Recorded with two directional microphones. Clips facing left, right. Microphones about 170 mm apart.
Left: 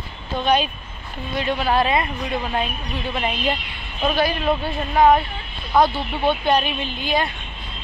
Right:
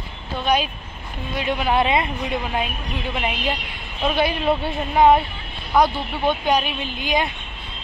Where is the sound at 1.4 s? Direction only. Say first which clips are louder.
Even; 15° right (ahead or behind).